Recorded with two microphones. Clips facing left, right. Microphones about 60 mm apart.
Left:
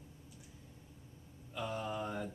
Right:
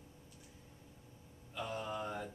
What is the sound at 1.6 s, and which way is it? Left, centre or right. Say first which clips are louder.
Speech: left 1 dB; centre.